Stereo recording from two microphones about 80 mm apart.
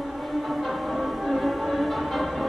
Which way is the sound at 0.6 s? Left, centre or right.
Centre.